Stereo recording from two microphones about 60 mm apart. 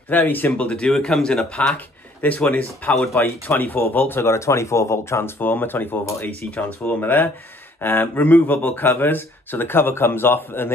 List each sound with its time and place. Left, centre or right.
0.1 s speech: left
0.5 s speech: centre
2.2 s speech: left
4.2 s speech: left
5.4 s speech: left